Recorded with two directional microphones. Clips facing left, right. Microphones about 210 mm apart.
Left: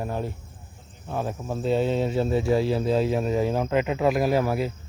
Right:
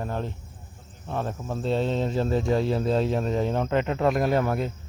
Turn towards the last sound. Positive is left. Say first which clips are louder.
# left 1 dB
turn(degrees=5)  # may be behind; listen again after turning